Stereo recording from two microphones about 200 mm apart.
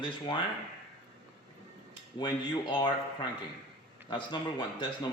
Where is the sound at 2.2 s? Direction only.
20° left (ahead or behind).